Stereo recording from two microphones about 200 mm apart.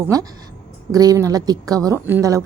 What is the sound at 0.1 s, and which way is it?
Speech, 15° right (ahead or behind).